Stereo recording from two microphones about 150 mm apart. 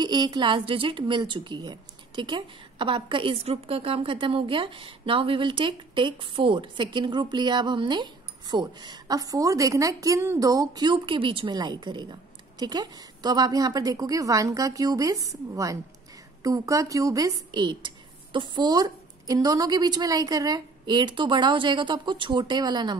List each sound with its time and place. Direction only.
0.0 s a woman's voice: 30° right (ahead or behind)